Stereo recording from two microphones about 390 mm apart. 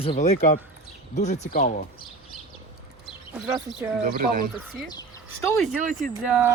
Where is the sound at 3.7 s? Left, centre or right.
Centre.